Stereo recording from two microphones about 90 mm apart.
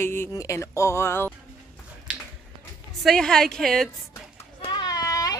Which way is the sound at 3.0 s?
5° left (ahead or behind).